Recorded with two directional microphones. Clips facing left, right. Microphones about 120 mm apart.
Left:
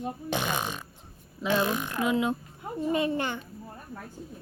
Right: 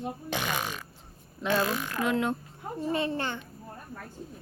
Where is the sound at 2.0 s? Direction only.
5° left (ahead or behind).